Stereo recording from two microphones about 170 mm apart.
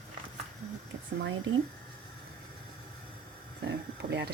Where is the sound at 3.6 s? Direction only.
90° right.